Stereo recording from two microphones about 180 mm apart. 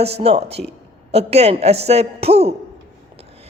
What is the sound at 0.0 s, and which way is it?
A man's voice, 35° right (ahead or behind).